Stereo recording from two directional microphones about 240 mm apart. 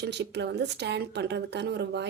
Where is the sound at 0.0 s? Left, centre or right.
Right.